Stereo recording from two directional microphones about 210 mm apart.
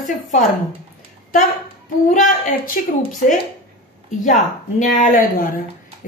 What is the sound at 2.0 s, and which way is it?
Speech, 40° left (ahead or behind).